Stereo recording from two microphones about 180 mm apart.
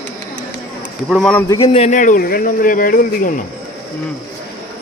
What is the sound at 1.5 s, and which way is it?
Speech, 30° left (ahead or behind).